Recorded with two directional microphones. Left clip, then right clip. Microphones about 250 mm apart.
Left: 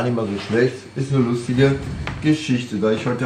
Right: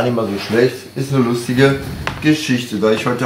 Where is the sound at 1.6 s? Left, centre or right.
Centre.